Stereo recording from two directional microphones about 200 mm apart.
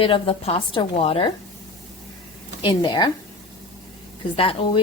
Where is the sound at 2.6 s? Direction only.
25° left (ahead or behind).